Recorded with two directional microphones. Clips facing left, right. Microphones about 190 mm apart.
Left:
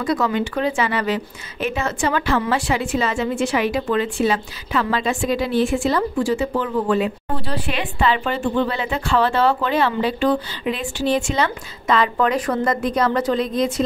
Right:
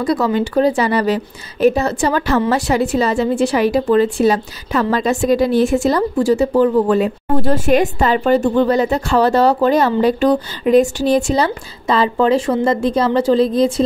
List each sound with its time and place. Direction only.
0.0 s a woman's voice: 35° right (ahead or behind)